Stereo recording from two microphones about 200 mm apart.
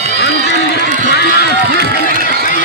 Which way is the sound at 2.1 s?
50° right (ahead or behind).